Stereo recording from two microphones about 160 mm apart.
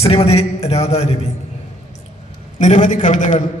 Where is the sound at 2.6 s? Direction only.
50° left (ahead or behind).